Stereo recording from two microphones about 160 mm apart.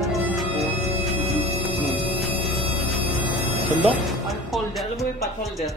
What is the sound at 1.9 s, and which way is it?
Scary music, centre (ahead or behind).